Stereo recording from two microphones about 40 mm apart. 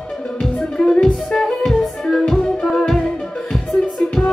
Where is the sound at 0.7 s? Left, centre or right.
Centre.